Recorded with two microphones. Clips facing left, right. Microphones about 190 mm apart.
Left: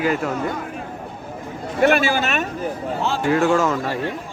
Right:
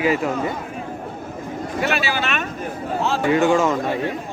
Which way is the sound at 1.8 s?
50° left (ahead or behind).